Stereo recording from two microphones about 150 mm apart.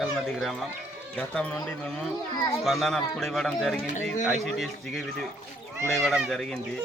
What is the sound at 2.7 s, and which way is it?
Speech, centre (ahead or behind).